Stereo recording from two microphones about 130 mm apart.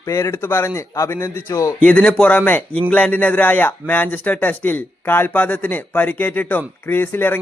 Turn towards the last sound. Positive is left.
turn(degrees=15)  # may be behind; listen again after turning